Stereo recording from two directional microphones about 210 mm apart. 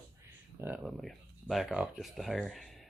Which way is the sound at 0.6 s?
5° right (ahead or behind).